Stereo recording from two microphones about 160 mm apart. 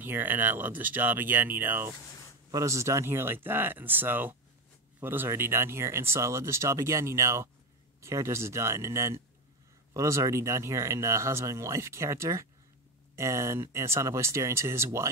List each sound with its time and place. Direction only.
0.0 s speech: 15° right (ahead or behind)